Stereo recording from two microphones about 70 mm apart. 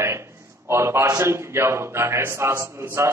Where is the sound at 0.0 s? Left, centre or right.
Right.